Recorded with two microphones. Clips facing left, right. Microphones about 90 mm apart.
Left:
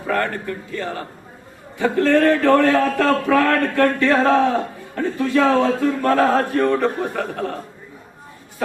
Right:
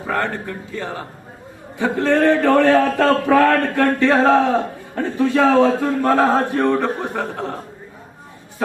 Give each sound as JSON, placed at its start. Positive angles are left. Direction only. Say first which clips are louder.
{"t": 0.1, "sound": "a man's voice", "louder": "left 1 dB", "side_deg": -20}